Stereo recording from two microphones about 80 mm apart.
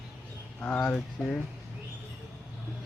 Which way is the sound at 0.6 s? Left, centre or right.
Centre.